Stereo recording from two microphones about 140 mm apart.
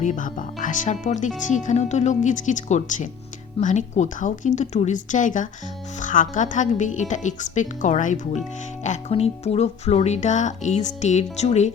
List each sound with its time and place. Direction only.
0.0 s speech: 65° left (ahead or behind)